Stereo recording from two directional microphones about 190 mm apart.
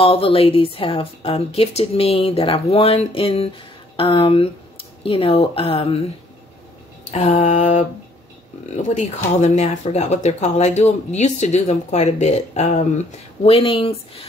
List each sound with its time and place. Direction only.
0.0 s a woman's voice: 30° left (ahead or behind)
7.1 s speech: 35° left (ahead or behind)